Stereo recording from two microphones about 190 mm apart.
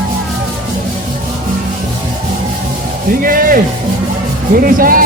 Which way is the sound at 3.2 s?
50° right (ahead or behind).